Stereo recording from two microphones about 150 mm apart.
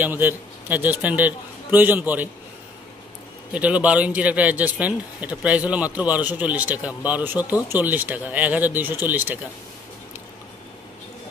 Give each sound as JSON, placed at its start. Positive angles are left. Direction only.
{"t": 0.0, "sound": "a man's voice", "side_deg": -10}
{"t": 3.5, "sound": "a man's voice", "side_deg": -10}